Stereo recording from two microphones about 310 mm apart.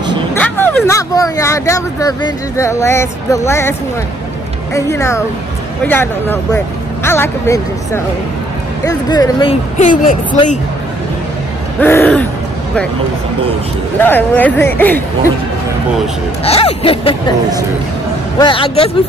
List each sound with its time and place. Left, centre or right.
0.4 s speech: centre
4.7 s speech: centre
11.8 s speech: centre
13.9 s speech: centre
16.4 s speech: centre
18.4 s speech: centre